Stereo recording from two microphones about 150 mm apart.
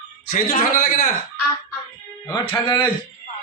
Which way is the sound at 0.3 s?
45° left (ahead or behind).